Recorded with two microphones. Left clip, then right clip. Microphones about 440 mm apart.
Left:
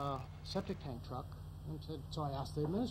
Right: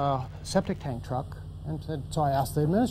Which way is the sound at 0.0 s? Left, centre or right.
Right.